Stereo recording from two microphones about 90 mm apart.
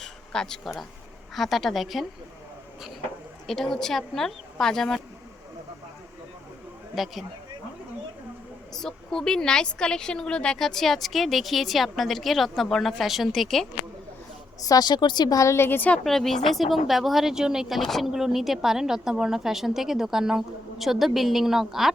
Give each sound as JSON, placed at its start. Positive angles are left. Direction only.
{"t": 0.0, "sound": "a sound", "side_deg": 5}
{"t": 1.4, "sound": "speech", "side_deg": 0}
{"t": 3.4, "sound": "speech", "side_deg": 5}
{"t": 6.9, "sound": "speech", "side_deg": 0}
{"t": 8.7, "sound": "speech", "side_deg": 5}
{"t": 14.6, "sound": "speech", "side_deg": 45}
{"t": 15.4, "sound": "a woman's voice", "side_deg": 30}
{"t": 16.0, "sound": "speech", "side_deg": 5}